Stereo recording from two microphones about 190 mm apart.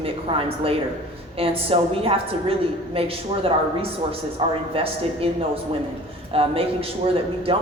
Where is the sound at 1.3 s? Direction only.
30° right (ahead or behind).